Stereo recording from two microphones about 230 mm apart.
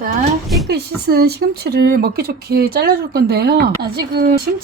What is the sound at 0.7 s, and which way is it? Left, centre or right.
Speech, right.